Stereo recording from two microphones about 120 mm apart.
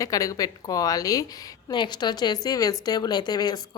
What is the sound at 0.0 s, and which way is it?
Speech, 30° left (ahead or behind).